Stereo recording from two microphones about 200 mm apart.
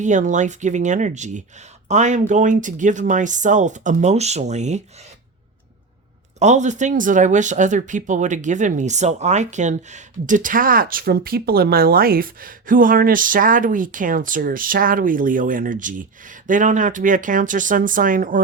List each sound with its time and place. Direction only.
0.0 s speech: 40° right (ahead or behind)
6.4 s speech: 35° right (ahead or behind)